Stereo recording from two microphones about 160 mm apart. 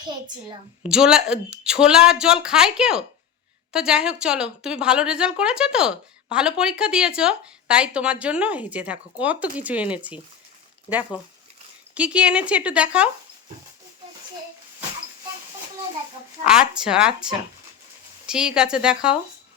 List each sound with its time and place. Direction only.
0.8 s a woman's voice: 5° right (ahead or behind)
16.5 s a woman's voice: 5° right (ahead or behind)